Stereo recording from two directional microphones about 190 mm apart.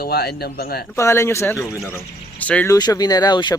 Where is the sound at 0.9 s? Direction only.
15° left (ahead or behind).